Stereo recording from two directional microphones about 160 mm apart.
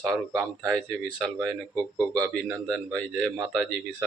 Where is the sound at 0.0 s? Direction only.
Centre (ahead or behind).